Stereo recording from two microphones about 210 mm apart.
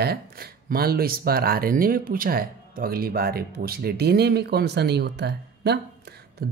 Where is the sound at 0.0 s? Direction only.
45° right (ahead or behind).